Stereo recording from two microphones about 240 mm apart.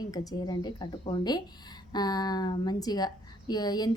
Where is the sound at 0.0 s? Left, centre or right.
Centre.